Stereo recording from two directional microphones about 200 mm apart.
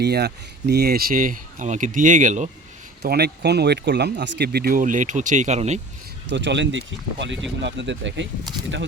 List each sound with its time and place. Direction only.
0.0 s speech: 55° right (ahead or behind); by 2.5 s 40° right (ahead or behind)
3.0 s speech: 55° right (ahead or behind); by 5.8 s 35° right (ahead or behind)
6.3 s speech: 60° right (ahead or behind)